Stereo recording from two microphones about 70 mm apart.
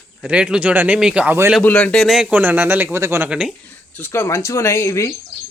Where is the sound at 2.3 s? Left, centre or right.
Right.